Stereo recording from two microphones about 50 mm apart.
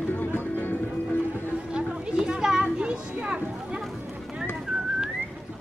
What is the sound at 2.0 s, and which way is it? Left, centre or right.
Children playing, centre.